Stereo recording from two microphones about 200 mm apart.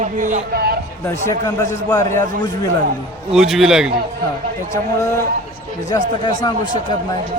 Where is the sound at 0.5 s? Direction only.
50° right (ahead or behind).